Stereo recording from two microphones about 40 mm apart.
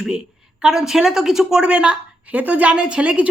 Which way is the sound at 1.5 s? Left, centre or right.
Right.